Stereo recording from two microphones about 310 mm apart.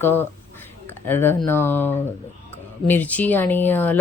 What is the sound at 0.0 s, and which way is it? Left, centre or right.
Speech, centre.